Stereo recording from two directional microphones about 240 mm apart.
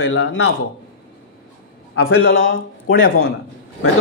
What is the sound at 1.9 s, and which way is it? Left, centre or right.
Speech, left.